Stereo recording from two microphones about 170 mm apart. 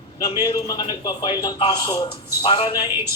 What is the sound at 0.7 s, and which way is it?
A man's voice, 20° left (ahead or behind).